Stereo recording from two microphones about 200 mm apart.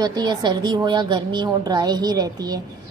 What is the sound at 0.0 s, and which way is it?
A woman's voice, 20° right (ahead or behind).